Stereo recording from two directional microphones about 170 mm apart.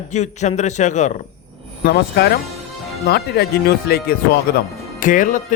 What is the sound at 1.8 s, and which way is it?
Speech, 65° left (ahead or behind).